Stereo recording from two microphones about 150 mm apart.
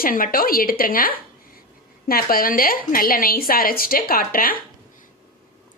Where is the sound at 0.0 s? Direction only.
70° left (ahead or behind).